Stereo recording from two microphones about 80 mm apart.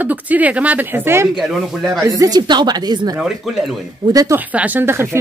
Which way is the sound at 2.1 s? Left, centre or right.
Right.